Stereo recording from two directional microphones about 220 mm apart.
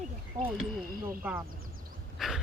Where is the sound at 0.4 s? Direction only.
15° right (ahead or behind).